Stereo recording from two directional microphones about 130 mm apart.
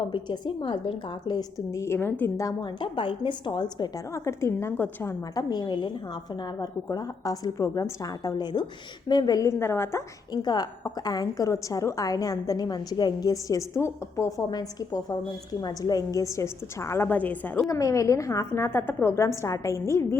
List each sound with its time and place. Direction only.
0.1 s a woman's voice: 35° left (ahead or behind)
2.8 s a woman's voice: 40° left (ahead or behind)
4.3 s a woman's voice: 20° left (ahead or behind)
5.3 s a woman's voice: 30° left (ahead or behind)
10.3 s a woman's voice: 30° left (ahead or behind); by 17.7 s 10° left (ahead or behind)
17.7 s a woman's voice: 25° left (ahead or behind)